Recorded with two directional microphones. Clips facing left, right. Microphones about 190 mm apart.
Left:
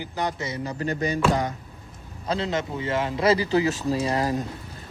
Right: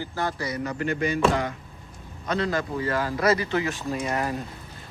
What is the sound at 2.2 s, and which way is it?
Speech, 25° left (ahead or behind).